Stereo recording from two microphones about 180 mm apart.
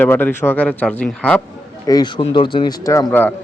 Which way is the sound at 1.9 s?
25° left (ahead or behind).